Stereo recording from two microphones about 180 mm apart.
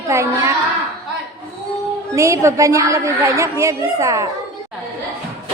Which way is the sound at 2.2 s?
15° right (ahead or behind).